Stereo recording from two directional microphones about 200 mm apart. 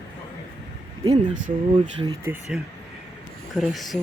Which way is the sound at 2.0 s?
15° right (ahead or behind).